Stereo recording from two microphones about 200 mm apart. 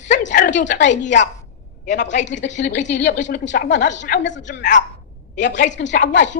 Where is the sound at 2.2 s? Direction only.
60° left (ahead or behind).